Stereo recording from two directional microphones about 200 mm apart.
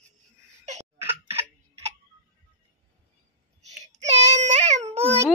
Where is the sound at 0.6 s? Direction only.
35° right (ahead or behind).